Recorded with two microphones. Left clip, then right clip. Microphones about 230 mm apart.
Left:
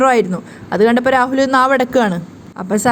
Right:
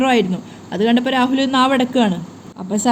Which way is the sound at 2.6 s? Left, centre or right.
Left.